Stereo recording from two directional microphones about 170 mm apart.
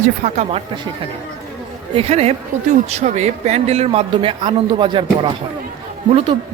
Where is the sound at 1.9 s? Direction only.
35° right (ahead or behind).